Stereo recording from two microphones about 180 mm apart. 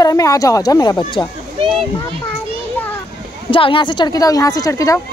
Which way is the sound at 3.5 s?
30° left (ahead or behind).